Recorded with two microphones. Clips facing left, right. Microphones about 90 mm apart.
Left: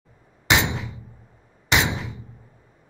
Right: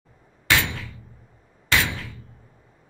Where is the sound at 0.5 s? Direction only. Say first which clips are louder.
Left 2 dB; 20° left (ahead or behind).